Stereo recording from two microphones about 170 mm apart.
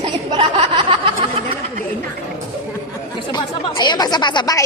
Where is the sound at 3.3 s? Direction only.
25° left (ahead or behind).